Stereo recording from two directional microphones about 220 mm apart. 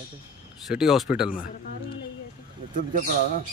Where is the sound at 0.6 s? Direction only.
Centre (ahead or behind).